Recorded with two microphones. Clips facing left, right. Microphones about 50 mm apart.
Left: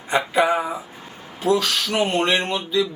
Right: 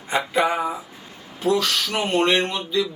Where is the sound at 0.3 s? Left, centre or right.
Centre.